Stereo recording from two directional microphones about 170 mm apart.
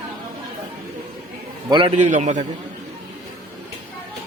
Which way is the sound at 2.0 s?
45° right (ahead or behind).